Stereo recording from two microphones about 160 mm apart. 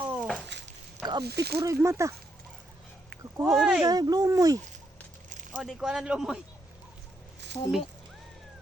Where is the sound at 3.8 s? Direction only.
25° right (ahead or behind).